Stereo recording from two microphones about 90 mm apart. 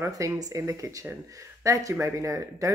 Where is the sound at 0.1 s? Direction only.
40° right (ahead or behind).